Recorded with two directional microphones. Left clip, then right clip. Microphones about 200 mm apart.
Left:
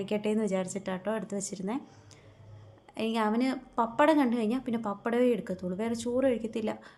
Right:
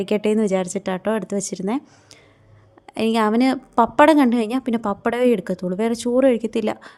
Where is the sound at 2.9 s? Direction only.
50° right (ahead or behind).